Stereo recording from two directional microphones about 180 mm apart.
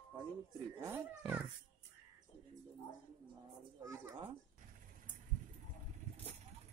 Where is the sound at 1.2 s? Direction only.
5° right (ahead or behind).